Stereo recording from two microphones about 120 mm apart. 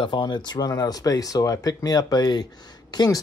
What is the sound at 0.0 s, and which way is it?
Speech, 40° left (ahead or behind).